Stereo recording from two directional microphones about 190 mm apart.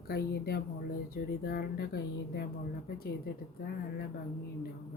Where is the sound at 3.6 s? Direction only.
55° left (ahead or behind).